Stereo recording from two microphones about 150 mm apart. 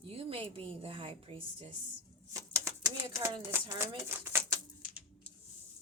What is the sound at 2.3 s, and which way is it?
Bird, 20° right (ahead or behind).